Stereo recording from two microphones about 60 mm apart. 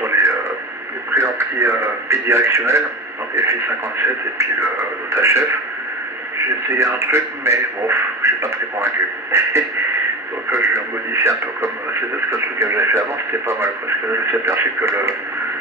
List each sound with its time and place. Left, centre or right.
0.0 s radio: right
1.1 s speech: right